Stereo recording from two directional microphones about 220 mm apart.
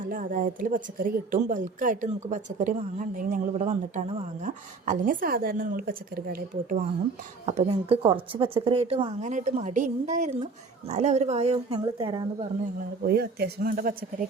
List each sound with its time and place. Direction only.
0.1 s a woman's voice: 35° right (ahead or behind); by 12.5 s 20° right (ahead or behind)
13.1 s a woman's voice: 45° right (ahead or behind)